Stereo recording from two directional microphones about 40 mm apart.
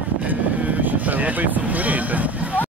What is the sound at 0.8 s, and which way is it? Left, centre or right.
Speech, right.